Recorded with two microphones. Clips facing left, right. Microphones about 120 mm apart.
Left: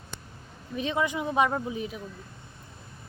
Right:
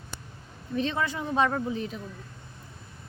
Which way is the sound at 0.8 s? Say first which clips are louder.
Left 1 dB; 15° left (ahead or behind).